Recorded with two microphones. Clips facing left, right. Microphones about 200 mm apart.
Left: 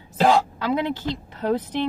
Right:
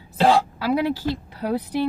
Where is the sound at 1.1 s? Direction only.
10° right (ahead or behind).